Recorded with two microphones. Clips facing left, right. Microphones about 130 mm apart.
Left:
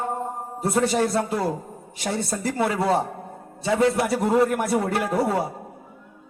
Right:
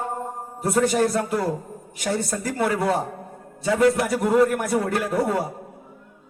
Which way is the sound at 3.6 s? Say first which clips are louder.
Right 1 dB; 25° left (ahead or behind).